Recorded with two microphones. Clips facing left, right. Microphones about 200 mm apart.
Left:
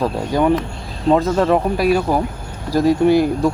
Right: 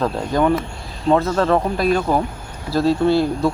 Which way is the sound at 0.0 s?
10° left (ahead or behind).